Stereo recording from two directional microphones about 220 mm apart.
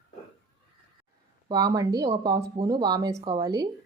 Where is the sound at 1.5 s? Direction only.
15° right (ahead or behind).